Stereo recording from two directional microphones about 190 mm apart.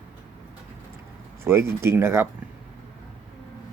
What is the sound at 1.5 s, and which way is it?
Speech, 15° right (ahead or behind).